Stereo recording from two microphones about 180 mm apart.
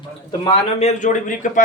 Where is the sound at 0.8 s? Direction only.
40° left (ahead or behind).